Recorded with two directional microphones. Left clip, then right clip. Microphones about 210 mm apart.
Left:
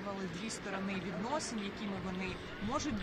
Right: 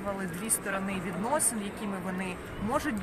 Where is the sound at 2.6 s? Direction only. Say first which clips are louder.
Right 7 dB; 20° right (ahead or behind).